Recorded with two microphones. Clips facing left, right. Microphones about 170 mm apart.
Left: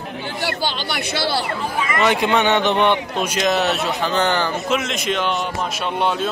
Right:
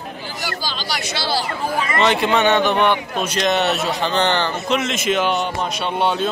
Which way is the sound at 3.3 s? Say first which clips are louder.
Right 1 dB; centre (ahead or behind).